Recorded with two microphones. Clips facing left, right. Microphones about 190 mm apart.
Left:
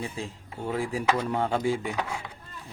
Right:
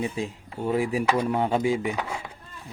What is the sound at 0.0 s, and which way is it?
Speech, 15° right (ahead or behind).